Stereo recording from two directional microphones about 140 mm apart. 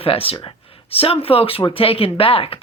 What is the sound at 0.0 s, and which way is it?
Speech, 40° left (ahead or behind).